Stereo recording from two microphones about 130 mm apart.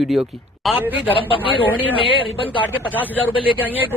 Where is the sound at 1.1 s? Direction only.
40° left (ahead or behind).